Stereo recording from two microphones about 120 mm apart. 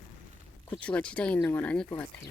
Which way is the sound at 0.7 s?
10° left (ahead or behind).